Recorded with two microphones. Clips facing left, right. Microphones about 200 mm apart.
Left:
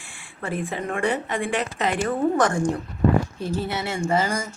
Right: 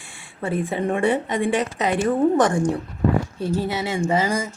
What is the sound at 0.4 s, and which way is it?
Speech, 25° right (ahead or behind).